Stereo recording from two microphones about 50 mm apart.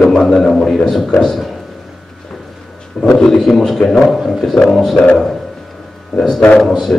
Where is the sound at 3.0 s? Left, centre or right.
Centre.